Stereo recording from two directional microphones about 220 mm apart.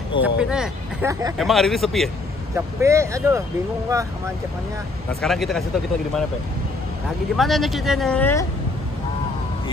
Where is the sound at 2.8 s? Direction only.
15° right (ahead or behind).